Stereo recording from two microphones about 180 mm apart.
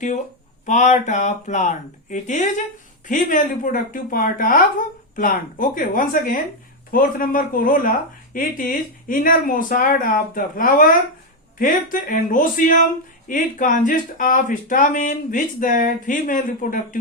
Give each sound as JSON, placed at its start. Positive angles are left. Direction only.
{"t": 0.6, "sound": "speech", "side_deg": 40}